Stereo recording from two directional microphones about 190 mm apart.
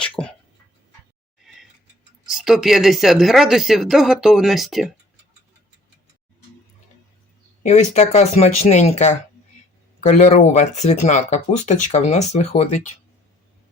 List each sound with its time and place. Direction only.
0.0 s a sound: 5° left (ahead or behind)
1.4 s mechanisms: centre (ahead or behind)
2.2 s speech: centre (ahead or behind)
7.6 s speech: 35° left (ahead or behind)